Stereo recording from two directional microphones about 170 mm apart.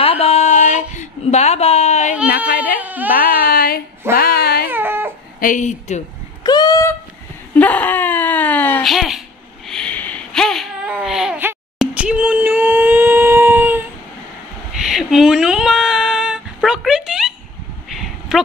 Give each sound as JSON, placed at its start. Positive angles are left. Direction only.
{"t": 0.0, "sound": "a sound", "side_deg": 35}
{"t": 2.2, "sound": "speech", "side_deg": 60}
{"t": 2.6, "sound": "speech", "side_deg": -10}
{"t": 3.2, "sound": "speech", "side_deg": 60}
{"t": 4.1, "sound": "a sound", "side_deg": 65}
{"t": 4.6, "sound": "baby cry", "side_deg": -10}
{"t": 5.4, "sound": "speech", "side_deg": 50}
{"t": 6.4, "sound": "speech", "side_deg": 25}
{"t": 7.5, "sound": "whimper", "side_deg": 10}
{"t": 8.8, "sound": "speech", "side_deg": 0}
{"t": 9.7, "sound": "a sound", "side_deg": 5}